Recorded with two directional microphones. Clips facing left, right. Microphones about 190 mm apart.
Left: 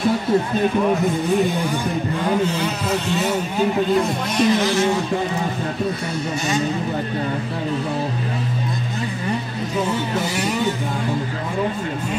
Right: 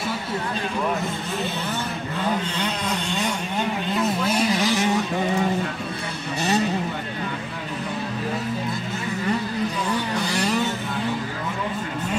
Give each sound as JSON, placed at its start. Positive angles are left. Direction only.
{"t": 1.3, "sound": "music", "side_deg": 15}
{"t": 2.2, "sound": "speech", "side_deg": 10}
{"t": 4.3, "sound": "vehicle", "side_deg": -10}
{"t": 9.8, "sound": "a sound", "side_deg": 20}